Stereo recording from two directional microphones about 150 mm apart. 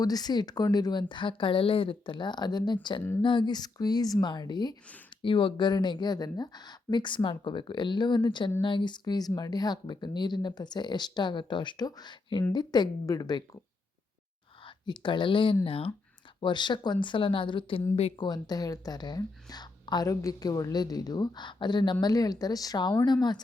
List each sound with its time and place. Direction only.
0.0 s speech: 25° left (ahead or behind)
14.6 s speech: 35° left (ahead or behind)
18.3 s speech: 25° left (ahead or behind)